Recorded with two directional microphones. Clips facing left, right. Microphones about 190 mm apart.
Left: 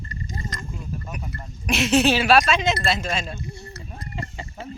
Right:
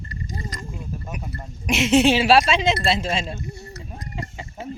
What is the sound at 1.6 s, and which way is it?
Speech, 20° right (ahead or behind).